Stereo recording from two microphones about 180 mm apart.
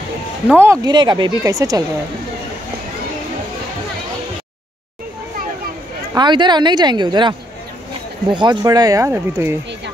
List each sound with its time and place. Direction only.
0.5 s speech: 15° right (ahead or behind)
6.1 s speech: 25° right (ahead or behind)